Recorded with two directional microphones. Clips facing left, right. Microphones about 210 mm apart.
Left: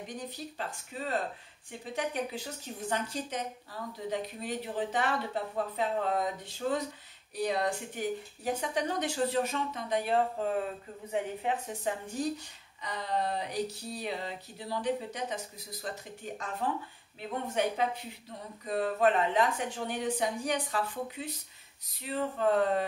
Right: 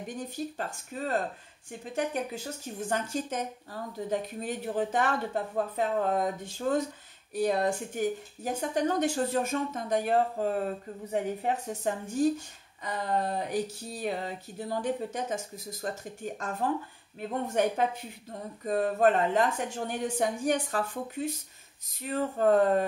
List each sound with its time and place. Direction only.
0.1 s speech: 45° right (ahead or behind)